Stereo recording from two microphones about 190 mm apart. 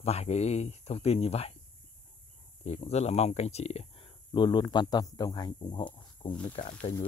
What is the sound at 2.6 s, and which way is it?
Speech, 35° left (ahead or behind).